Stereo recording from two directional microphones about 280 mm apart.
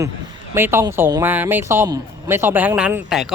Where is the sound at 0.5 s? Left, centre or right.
Centre.